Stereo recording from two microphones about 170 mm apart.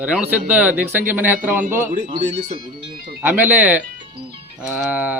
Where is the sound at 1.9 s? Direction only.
50° right (ahead or behind).